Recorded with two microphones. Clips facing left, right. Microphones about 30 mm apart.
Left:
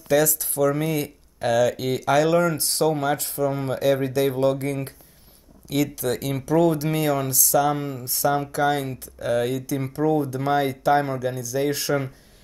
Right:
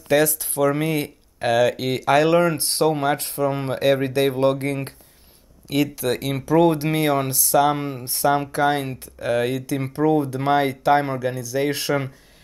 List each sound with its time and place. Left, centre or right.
0.1 s speech: right
3.3 s speech: right